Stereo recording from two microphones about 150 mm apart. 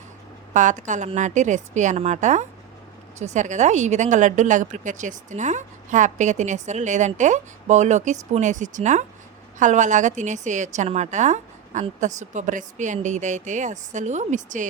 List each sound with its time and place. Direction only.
0.5 s speech: 55° right (ahead or behind)